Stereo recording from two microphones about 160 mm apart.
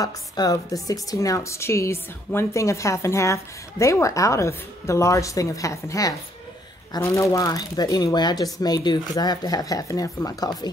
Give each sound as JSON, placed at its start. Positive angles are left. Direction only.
{"t": 0.0, "sound": "a woman's voice", "side_deg": 20}